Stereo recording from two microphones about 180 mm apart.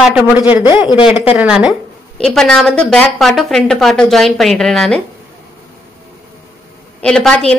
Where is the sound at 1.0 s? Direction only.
5° right (ahead or behind).